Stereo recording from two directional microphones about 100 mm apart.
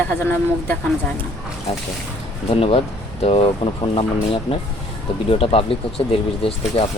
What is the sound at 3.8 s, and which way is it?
Speech, 60° left (ahead or behind).